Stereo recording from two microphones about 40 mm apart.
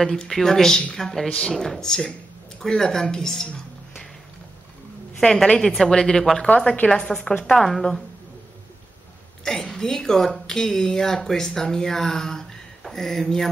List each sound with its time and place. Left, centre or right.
0.2 s a woman's voice: centre
5.6 s a woman's voice: centre
7.5 s speech: centre
9.4 s speech: centre